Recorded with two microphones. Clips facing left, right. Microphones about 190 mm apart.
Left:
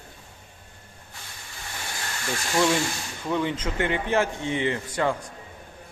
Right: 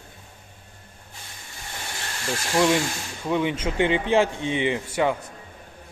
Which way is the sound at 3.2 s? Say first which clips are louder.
Right 2 dB; 15° right (ahead or behind).